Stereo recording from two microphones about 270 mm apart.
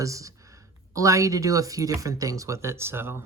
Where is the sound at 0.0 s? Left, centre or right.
Centre.